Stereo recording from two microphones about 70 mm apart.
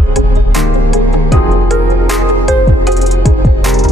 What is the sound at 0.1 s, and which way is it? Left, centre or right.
Music, centre.